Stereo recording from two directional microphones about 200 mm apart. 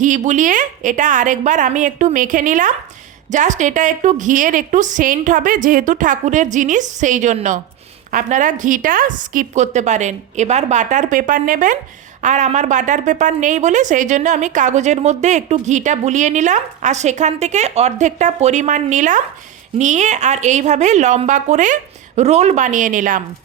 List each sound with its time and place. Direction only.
0.0 s a woman's voice: 40° right (ahead or behind)